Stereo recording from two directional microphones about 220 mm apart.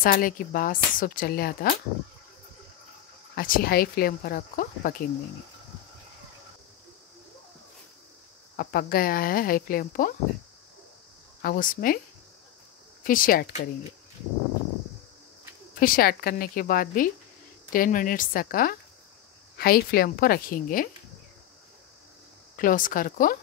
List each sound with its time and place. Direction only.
0.0 s a woman's voice: 40° left (ahead or behind)
3.3 s a woman's voice: 40° left (ahead or behind)
8.5 s a woman's voice: 40° left (ahead or behind)
11.4 s a woman's voice: 40° left (ahead or behind)
13.0 s a woman's voice: 40° left (ahead or behind)
15.7 s a woman's voice: 40° left (ahead or behind)
22.6 s a woman's voice: 40° left (ahead or behind)